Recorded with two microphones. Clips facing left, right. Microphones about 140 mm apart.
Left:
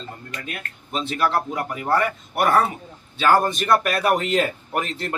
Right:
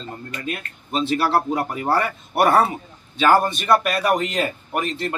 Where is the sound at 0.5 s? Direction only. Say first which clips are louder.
Right 5 dB; 30° right (ahead or behind).